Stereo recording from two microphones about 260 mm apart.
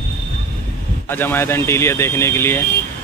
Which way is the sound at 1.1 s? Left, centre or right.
Centre.